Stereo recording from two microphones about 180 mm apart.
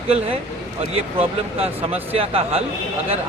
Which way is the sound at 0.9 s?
35° right (ahead or behind).